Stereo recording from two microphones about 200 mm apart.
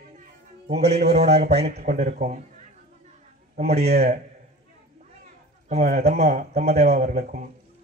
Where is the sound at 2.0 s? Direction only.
40° right (ahead or behind).